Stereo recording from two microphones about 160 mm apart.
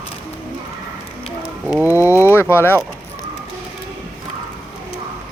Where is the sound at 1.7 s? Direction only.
10° right (ahead or behind).